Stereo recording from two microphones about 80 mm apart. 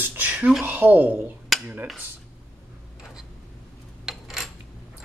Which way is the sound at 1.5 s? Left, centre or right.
Centre.